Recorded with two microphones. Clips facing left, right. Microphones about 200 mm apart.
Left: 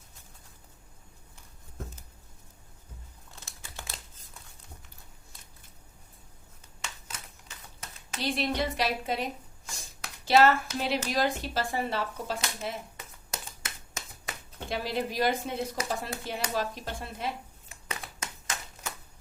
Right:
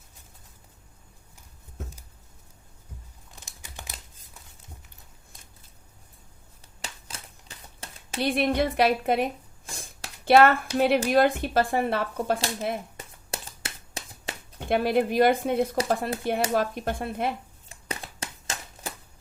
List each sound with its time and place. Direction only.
3.4 s computer keyboard: 15° right (ahead or behind)
6.8 s a sound: 30° right (ahead or behind)
8.2 s speech: 55° right (ahead or behind)
13.3 s scissors: 30° right (ahead or behind)
14.7 s speech: 55° right (ahead or behind)
17.7 s a sound: 30° right (ahead or behind)